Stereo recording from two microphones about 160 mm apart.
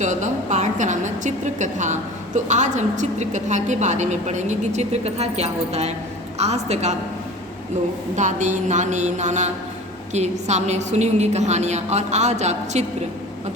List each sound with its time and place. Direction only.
0.0 s a woman's voice: 50° right (ahead or behind)
8.1 s a woman's voice: 50° right (ahead or behind)